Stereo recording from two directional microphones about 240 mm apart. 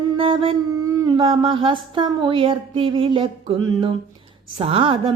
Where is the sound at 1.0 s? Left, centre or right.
Right.